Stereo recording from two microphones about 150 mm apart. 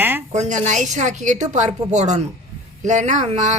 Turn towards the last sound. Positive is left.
turn(degrees=-50)  # may be behind; listen again after turning